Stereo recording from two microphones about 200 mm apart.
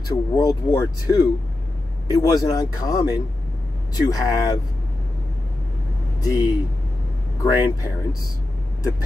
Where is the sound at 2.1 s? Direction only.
20° left (ahead or behind).